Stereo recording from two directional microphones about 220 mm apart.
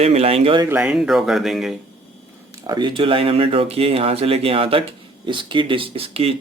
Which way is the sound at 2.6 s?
20° right (ahead or behind).